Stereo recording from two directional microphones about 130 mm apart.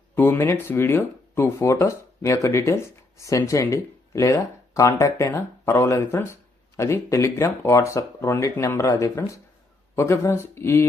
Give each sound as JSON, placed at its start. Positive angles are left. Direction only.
{"t": 0.2, "sound": "speech", "side_deg": 20}